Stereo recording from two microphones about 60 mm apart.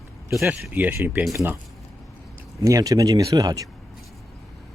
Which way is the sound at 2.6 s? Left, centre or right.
Right.